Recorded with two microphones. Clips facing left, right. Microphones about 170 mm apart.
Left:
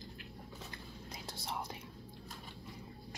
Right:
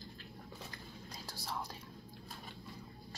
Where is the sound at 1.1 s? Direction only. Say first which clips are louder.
Left 1 dB; 20° left (ahead or behind).